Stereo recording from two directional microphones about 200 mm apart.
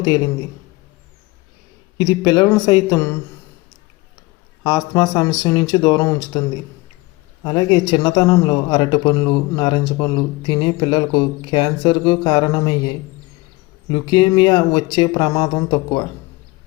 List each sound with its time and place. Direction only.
2.0 s speech: 20° left (ahead or behind)
4.9 s speech: 20° left (ahead or behind)
7.4 s speech: 25° left (ahead or behind)
13.9 s speech: 25° left (ahead or behind)